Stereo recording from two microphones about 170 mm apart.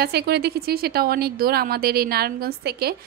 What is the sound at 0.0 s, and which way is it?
A woman's voice, 70° right (ahead or behind).